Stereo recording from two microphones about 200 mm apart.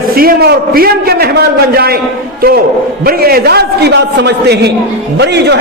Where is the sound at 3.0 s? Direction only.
50° right (ahead or behind).